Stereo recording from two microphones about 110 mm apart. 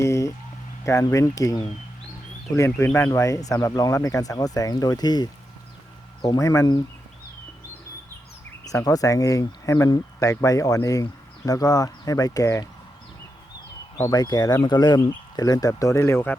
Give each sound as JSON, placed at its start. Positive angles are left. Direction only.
{"t": 0.0, "sound": "a sound", "side_deg": 25}
{"t": 0.9, "sound": "speech", "side_deg": 30}
{"t": 2.6, "sound": "speech", "side_deg": 25}
{"t": 8.6, "sound": "speech", "side_deg": 35}
{"t": 14.0, "sound": "speech", "side_deg": 35}